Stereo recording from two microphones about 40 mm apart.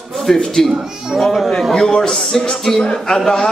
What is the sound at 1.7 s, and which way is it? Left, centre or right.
A man's voice, centre.